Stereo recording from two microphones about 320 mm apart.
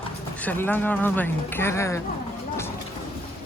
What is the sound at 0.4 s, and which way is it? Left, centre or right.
Speech, centre.